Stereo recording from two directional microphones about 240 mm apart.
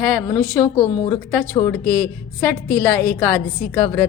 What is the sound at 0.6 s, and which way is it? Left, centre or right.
Speech, left.